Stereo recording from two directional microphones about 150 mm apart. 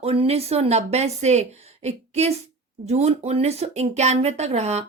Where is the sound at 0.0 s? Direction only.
40° right (ahead or behind).